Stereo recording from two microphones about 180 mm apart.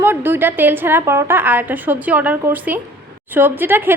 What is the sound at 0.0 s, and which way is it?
A woman's voice, 10° right (ahead or behind).